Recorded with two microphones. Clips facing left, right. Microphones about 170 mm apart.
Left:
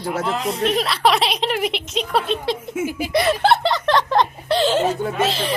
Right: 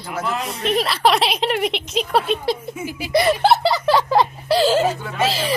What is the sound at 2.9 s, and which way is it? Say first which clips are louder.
Speech: left 4 dB; 50° left (ahead or behind).